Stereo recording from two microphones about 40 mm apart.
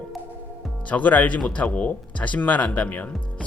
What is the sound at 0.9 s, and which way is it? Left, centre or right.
Speech, left.